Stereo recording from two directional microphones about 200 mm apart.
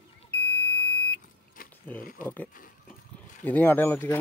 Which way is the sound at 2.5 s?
45° left (ahead or behind).